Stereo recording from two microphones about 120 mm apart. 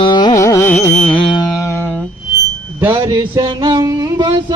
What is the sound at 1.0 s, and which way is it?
Carnatic music, 10° left (ahead or behind).